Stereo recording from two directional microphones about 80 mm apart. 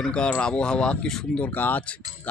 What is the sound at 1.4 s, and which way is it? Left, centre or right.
Speech, left.